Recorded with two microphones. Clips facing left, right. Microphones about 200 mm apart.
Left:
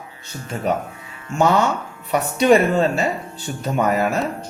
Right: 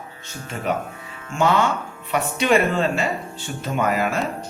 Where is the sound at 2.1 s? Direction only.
35° left (ahead or behind).